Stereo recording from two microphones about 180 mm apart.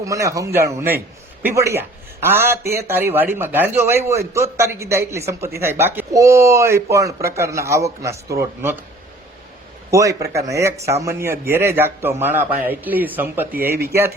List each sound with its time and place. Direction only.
0.0 s a man's voice: 15° right (ahead or behind)
9.9 s a man's voice: 20° right (ahead or behind)